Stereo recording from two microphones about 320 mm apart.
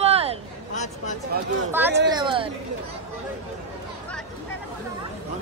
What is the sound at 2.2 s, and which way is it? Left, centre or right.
Speech, centre.